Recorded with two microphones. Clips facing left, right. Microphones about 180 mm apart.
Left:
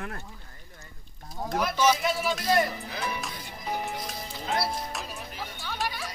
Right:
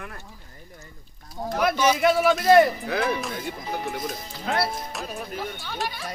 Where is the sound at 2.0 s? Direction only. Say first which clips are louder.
Right 9 dB; 65° right (ahead or behind).